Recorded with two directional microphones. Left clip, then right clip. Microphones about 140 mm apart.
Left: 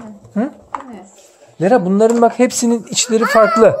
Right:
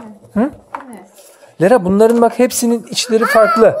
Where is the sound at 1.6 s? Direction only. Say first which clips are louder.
Right 2 dB; 35° right (ahead or behind).